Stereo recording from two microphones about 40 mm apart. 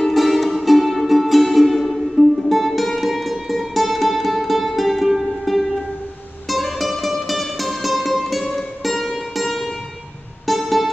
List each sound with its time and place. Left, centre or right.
0.1 s music: centre